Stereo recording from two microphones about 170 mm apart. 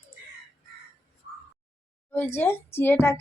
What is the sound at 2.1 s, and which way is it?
A woman's voice, 10° left (ahead or behind).